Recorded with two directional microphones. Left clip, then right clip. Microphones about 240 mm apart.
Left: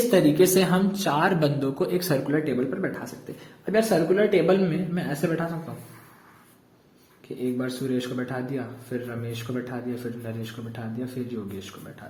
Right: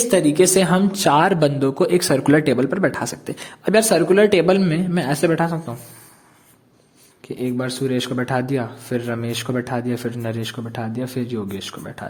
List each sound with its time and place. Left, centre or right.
0.1 s a woman's voice: right
2.3 s a man's voice: right
7.2 s a sound: right
7.6 s a man's voice: right